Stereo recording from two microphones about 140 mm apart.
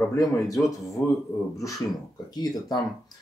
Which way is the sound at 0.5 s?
Centre (ahead or behind).